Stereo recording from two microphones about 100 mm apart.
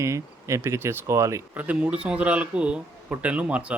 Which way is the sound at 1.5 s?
15° right (ahead or behind).